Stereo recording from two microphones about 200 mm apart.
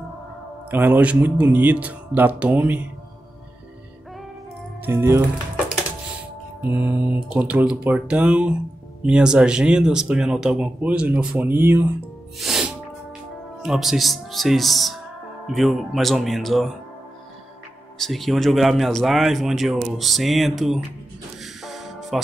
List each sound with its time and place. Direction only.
0.7 s speech: 10° right (ahead or behind)
4.8 s speech: 10° right (ahead or behind)
6.6 s speech: 10° right (ahead or behind)
12.4 s music: centre (ahead or behind)
13.6 s speech: centre (ahead or behind)
17.9 s speech: centre (ahead or behind)
21.4 s music: centre (ahead or behind)